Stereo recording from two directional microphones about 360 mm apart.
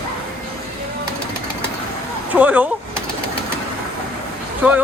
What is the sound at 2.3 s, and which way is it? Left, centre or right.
Speech, centre.